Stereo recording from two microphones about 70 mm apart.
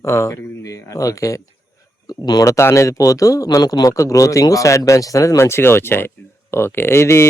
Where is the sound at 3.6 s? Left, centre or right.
Left.